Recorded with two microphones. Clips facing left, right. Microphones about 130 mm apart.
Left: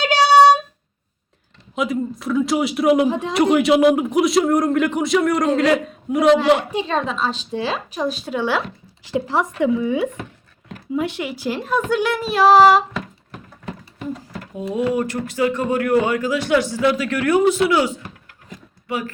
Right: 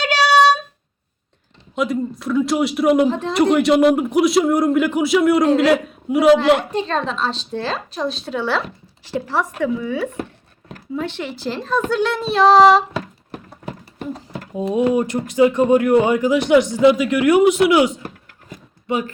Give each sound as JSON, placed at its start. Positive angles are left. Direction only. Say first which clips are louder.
{"t": 0.0, "sound": "a sound", "louder": "left 2 dB", "side_deg": 20}
{"t": 1.7, "sound": "a man's voice", "louder": "right 1 dB", "side_deg": 0}
{"t": 3.1, "sound": "a woman's voice", "louder": "even", "side_deg": 10}
{"t": 14.5, "sound": "speech", "louder": "right 4 dB", "side_deg": -20}